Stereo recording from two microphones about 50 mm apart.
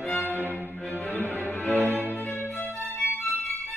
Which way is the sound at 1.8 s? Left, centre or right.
Right.